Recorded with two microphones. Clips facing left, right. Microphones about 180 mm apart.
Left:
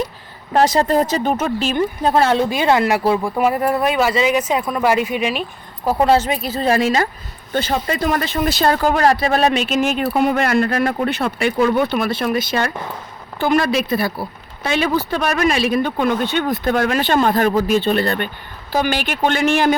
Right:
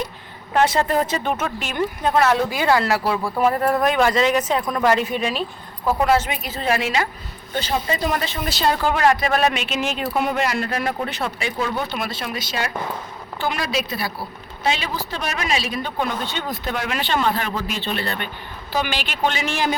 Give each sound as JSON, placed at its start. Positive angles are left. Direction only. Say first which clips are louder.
{"t": 0.5, "sound": "speech", "louder": "left 4 dB", "side_deg": 40}
{"t": 5.8, "sound": "speech", "louder": "left 3 dB", "side_deg": 30}
{"t": 7.5, "sound": "a man's voice", "louder": "left 3 dB", "side_deg": 55}